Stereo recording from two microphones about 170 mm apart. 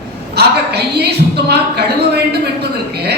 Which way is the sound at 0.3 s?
75° right (ahead or behind).